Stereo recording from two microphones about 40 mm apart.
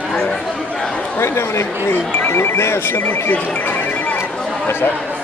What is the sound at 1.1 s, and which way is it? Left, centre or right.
Speech, left.